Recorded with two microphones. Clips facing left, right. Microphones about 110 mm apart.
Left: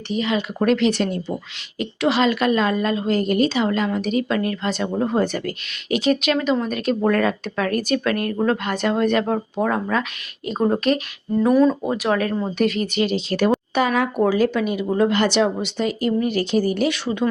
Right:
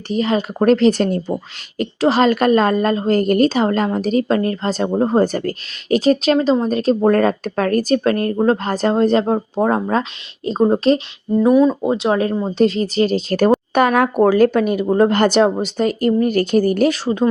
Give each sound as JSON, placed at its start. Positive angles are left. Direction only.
{"t": 0.1, "sound": "speech", "side_deg": -40}
{"t": 11.4, "sound": "speech", "side_deg": -15}